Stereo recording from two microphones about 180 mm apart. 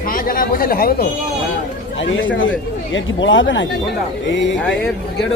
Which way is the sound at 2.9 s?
90° left.